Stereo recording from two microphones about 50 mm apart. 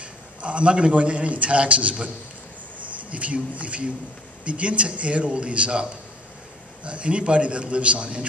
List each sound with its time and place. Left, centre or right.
0.0 s a man's voice: right